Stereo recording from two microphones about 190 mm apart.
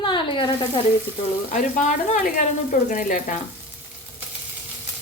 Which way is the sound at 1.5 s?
40° left (ahead or behind).